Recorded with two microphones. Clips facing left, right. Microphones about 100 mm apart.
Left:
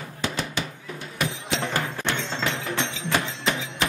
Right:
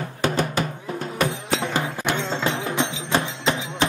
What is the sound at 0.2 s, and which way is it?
Music, 50° right (ahead or behind).